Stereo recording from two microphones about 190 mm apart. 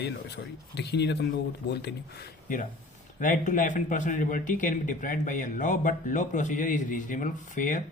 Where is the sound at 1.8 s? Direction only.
50° left (ahead or behind).